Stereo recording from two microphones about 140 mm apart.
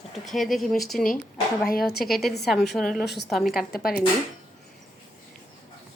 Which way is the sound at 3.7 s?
90° left.